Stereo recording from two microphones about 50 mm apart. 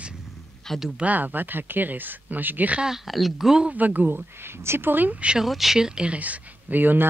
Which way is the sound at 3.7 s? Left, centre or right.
Right.